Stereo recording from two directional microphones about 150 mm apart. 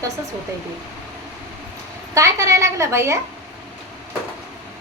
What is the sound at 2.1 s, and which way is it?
A woman's voice, 20° right (ahead or behind).